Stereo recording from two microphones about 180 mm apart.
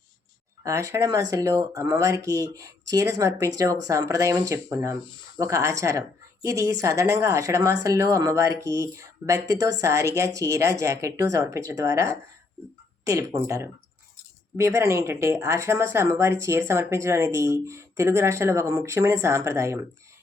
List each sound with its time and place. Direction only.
0.6 s speech: 15° right (ahead or behind)